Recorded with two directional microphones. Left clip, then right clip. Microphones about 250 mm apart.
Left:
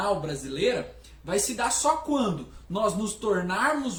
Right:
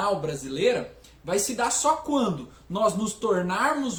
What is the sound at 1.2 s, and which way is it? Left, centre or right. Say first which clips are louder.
A woman's voice: right 1 dB; centre.